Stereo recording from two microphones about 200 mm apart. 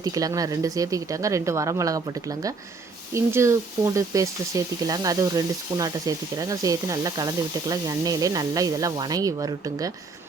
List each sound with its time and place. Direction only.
0.0 s speech: 20° right (ahead or behind)